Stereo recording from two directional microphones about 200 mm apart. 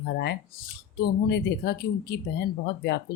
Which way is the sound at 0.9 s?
55° left (ahead or behind).